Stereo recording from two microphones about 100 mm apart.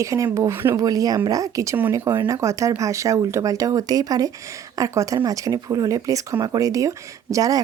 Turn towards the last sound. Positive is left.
turn(degrees=-35)  # may be behind; listen again after turning